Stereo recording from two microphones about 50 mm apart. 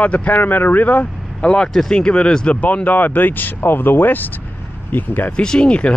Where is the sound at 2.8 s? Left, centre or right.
Left.